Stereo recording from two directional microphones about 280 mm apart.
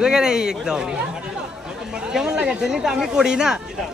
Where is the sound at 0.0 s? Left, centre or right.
Centre.